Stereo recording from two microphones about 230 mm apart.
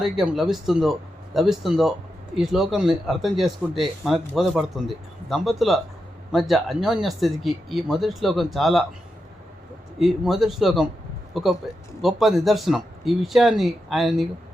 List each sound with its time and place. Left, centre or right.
0.0 s speech: centre
10.0 s speech: centre